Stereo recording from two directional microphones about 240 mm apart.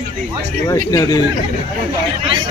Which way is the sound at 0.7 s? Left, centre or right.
Centre.